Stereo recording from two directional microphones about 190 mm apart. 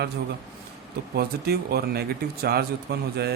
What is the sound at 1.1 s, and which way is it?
Speech, 55° right (ahead or behind).